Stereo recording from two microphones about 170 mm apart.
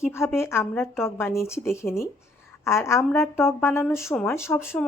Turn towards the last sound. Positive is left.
turn(degrees=15)  # may be behind; listen again after turning